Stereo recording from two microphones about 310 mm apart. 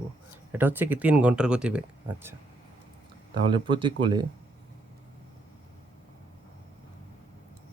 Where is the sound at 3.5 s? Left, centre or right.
Centre.